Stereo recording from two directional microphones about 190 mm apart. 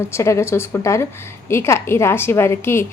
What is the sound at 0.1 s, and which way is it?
A woman's voice, 15° left (ahead or behind).